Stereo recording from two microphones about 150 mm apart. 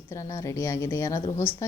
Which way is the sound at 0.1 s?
20° left (ahead or behind).